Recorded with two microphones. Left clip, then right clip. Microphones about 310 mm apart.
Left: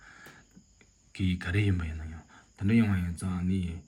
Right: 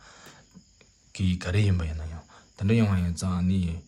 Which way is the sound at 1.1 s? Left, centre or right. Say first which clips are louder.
Right 2 dB; centre.